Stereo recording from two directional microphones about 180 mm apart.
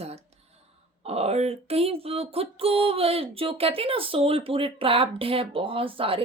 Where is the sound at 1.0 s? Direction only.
35° right (ahead or behind).